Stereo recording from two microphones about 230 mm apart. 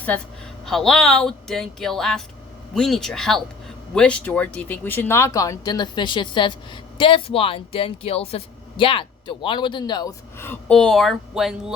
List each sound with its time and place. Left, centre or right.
0.6 s speech: centre